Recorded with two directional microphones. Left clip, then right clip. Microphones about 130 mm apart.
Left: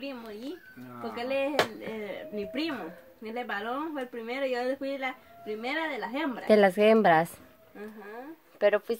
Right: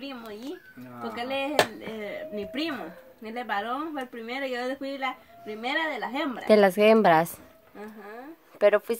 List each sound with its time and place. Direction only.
1.1 s speech: 25° right (ahead or behind)
6.4 s a woman's voice: 5° right (ahead or behind)
8.5 s speech: 20° right (ahead or behind)